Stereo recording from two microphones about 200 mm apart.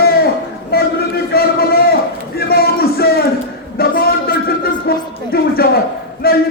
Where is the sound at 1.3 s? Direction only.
50° left (ahead or behind).